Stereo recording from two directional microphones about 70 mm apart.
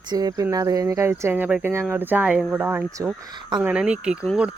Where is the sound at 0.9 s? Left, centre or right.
Right; by 2.6 s centre.